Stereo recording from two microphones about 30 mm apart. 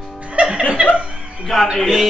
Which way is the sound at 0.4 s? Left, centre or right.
Right.